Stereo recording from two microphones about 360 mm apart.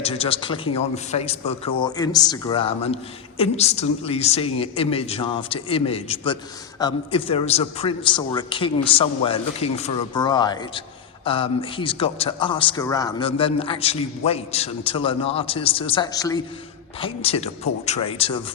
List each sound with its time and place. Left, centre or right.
0.0 s speech: centre